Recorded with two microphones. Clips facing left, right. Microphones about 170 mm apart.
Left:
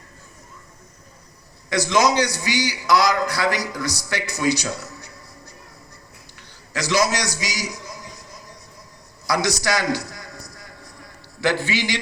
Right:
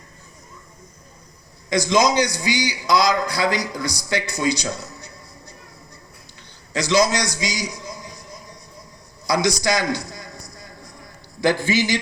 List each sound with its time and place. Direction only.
1.7 s a man's voice: 15° right (ahead or behind)
6.8 s a man's voice: 20° right (ahead or behind)
9.2 s a man's voice: 15° right (ahead or behind)
11.7 s speech: 45° right (ahead or behind)